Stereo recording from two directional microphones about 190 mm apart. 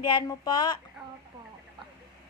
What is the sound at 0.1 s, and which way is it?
Speech, 20° left (ahead or behind).